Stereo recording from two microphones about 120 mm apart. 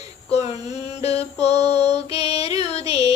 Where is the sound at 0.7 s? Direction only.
60° left (ahead or behind).